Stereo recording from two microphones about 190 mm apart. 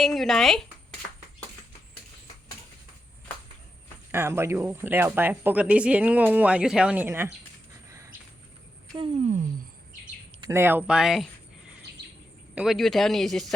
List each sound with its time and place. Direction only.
0.0 s speech: centre (ahead or behind)
4.1 s speech: 15° right (ahead or behind)
7.9 s a sound: 15° right (ahead or behind)
9.0 s speech: 35° right (ahead or behind)
10.4 s speech: 15° right (ahead or behind)
12.5 s speech: centre (ahead or behind)